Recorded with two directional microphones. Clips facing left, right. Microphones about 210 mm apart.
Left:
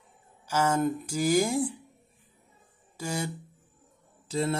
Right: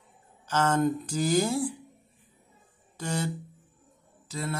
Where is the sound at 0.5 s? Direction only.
10° left (ahead or behind).